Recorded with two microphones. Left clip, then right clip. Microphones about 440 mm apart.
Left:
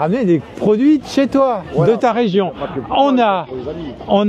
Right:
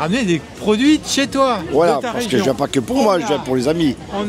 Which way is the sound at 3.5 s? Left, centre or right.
Right.